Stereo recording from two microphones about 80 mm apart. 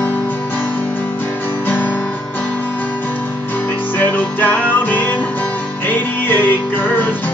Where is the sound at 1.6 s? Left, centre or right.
Left.